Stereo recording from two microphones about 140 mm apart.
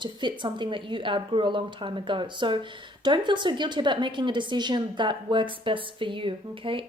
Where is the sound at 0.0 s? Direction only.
35° right (ahead or behind).